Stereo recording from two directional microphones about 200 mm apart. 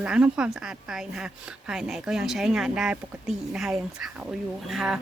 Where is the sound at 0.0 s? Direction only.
5° right (ahead or behind).